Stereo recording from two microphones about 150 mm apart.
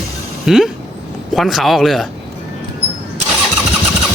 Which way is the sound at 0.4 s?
5° right (ahead or behind).